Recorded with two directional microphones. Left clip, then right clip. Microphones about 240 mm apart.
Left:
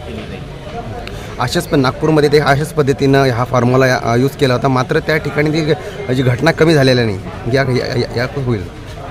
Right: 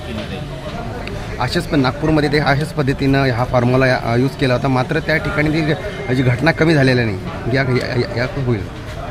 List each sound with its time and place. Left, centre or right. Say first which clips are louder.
1.4 s speech: left 3 dB; left